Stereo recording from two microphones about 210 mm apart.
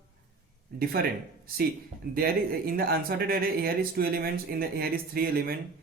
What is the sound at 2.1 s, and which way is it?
Speech, 45° right (ahead or behind).